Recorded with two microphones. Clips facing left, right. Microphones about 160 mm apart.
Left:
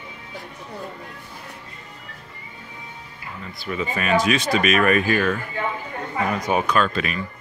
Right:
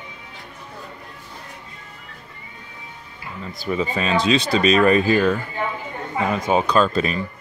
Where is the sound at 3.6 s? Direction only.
30° right (ahead or behind).